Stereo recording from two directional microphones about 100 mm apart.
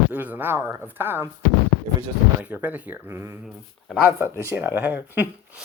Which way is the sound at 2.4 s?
15° right (ahead or behind).